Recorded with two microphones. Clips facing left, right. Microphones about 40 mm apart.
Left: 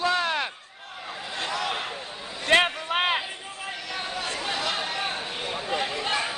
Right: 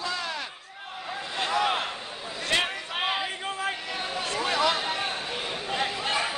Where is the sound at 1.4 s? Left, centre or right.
Centre.